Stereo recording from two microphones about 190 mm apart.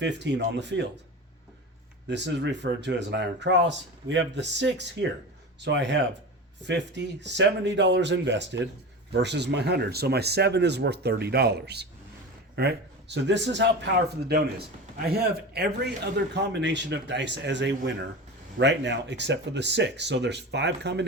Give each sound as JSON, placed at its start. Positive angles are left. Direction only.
{"t": 0.0, "sound": "speech", "side_deg": -65}
{"t": 2.0, "sound": "speech", "side_deg": -65}